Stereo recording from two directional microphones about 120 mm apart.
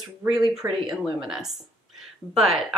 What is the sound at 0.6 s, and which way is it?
Speech, 20° right (ahead or behind).